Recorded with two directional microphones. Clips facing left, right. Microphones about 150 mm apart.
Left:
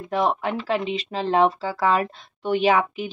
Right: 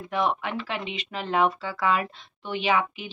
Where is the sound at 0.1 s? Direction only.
35° left (ahead or behind).